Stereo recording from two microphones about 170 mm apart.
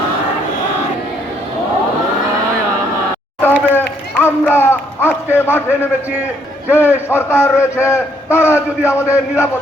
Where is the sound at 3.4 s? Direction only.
10° left (ahead or behind).